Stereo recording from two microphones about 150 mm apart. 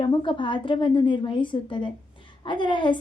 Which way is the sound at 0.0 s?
35° left (ahead or behind).